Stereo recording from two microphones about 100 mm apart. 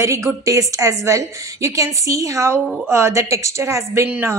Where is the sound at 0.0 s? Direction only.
30° right (ahead or behind).